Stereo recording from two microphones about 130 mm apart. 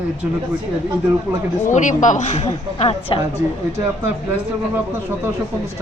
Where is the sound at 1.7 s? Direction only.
70° left (ahead or behind); by 3.2 s 50° left (ahead or behind).